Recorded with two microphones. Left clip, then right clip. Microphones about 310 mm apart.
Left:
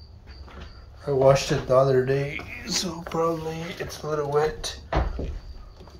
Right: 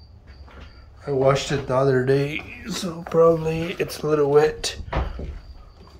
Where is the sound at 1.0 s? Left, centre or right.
Centre; by 4.8 s right.